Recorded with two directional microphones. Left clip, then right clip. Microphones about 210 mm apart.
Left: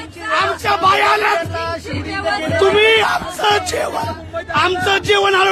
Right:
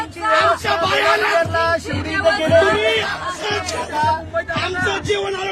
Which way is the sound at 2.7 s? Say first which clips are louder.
Left 6 dB; 40° left (ahead or behind).